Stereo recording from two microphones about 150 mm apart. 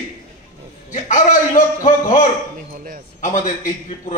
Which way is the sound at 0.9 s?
55° left (ahead or behind).